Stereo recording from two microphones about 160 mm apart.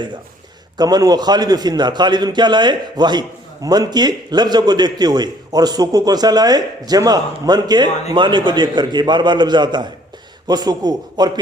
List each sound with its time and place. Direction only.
0.8 s a man's voice: 25° right (ahead or behind)